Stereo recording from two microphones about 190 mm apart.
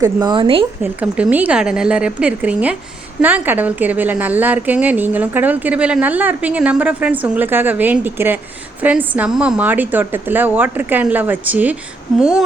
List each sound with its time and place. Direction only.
0.0 s speech: 20° right (ahead or behind)
0.8 s a woman's voice: 5° right (ahead or behind)